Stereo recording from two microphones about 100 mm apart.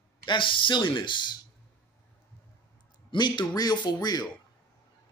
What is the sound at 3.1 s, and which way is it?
Speech, 50° left (ahead or behind).